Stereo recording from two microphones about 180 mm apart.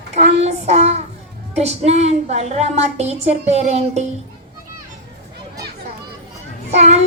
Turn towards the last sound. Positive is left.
turn(degrees=-35)  # may be behind; listen again after turning